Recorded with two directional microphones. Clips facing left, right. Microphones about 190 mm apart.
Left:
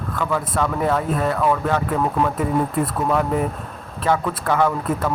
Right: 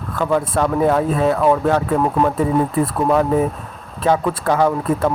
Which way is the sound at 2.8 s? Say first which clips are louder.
Right 4 dB; 20° right (ahead or behind).